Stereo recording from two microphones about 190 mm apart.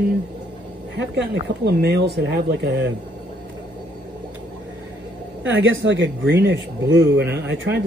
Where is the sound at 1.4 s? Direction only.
60° right (ahead or behind).